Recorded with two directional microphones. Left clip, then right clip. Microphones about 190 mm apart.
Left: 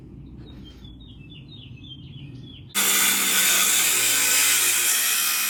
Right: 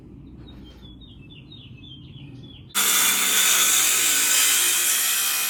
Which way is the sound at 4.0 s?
15° right (ahead or behind).